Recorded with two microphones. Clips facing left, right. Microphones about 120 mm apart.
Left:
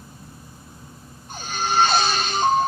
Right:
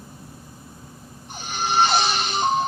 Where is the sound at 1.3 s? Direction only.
15° right (ahead or behind).